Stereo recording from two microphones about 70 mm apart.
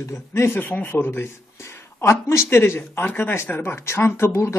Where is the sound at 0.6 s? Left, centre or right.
Left.